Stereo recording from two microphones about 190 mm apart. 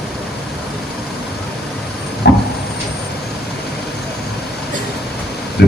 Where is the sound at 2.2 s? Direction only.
65° left (ahead or behind).